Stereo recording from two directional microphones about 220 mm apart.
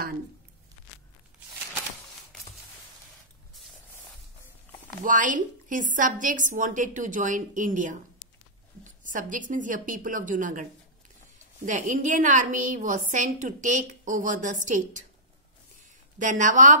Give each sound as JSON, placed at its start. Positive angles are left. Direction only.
{"t": 5.0, "sound": "a woman's voice", "side_deg": -35}
{"t": 16.2, "sound": "a woman's voice", "side_deg": -35}